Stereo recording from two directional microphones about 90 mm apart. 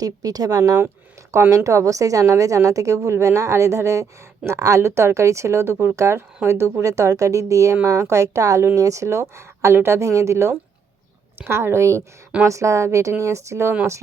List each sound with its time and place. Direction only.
0.0 s a woman's voice: 45° right (ahead or behind)